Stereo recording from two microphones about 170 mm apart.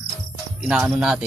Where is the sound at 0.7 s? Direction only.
5° right (ahead or behind).